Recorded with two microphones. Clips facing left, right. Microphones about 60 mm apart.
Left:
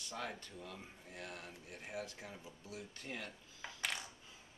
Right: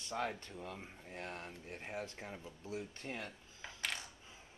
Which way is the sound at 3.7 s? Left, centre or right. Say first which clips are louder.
Even; centre.